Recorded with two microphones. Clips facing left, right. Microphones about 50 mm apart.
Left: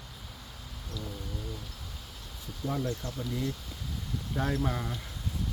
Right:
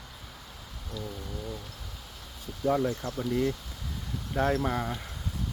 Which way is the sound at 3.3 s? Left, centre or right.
Right.